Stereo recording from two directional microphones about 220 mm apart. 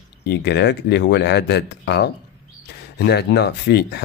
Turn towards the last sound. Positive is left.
turn(degrees=50)  # may be behind; listen again after turning